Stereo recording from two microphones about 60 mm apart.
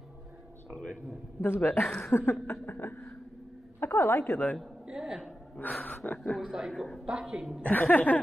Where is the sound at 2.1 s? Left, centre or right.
Left.